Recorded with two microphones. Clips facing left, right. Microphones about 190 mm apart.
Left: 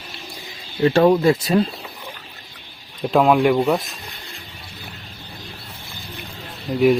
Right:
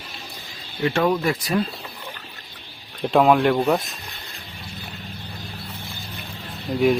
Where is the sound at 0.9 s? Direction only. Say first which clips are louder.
Left 6 dB; 30° left (ahead or behind).